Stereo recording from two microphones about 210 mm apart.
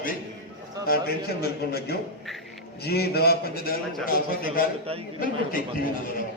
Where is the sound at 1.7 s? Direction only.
50° left (ahead or behind).